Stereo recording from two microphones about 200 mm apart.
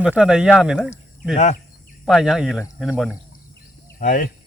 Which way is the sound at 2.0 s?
Centre (ahead or behind).